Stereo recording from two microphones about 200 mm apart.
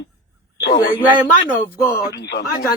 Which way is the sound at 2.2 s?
55° left (ahead or behind).